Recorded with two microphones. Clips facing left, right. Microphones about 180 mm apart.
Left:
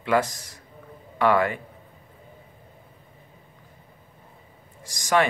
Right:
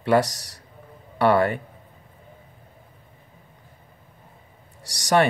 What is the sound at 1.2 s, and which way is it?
Speech, 35° right (ahead or behind).